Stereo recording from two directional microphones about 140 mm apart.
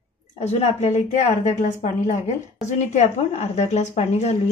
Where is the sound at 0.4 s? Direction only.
50° left (ahead or behind).